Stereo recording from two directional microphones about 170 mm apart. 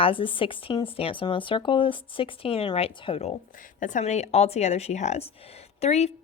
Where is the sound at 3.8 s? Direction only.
50° left (ahead or behind).